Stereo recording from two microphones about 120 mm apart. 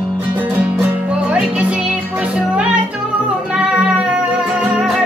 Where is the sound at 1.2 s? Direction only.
10° right (ahead or behind).